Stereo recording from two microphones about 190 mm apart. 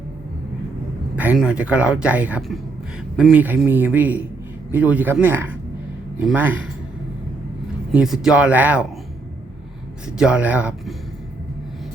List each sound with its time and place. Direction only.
1.1 s speech: 5° right (ahead or behind)
7.9 s speech: centre (ahead or behind)
10.1 s speech: 5° right (ahead or behind)